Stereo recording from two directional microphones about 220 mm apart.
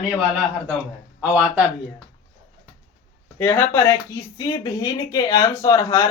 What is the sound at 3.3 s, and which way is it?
Speech, 10° left (ahead or behind).